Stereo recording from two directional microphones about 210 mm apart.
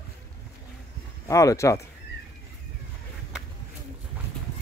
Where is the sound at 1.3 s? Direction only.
15° left (ahead or behind).